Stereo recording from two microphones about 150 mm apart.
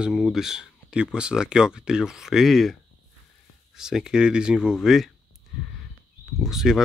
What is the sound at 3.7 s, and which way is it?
Speech, 5° right (ahead or behind).